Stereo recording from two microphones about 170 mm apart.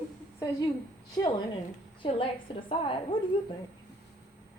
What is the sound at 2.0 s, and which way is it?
A woman's voice, 30° left (ahead or behind).